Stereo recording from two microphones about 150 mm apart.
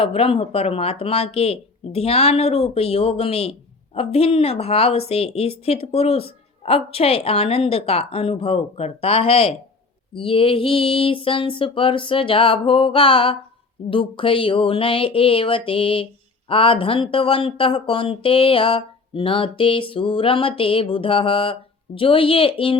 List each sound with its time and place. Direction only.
0.0 s speech: 40° left (ahead or behind)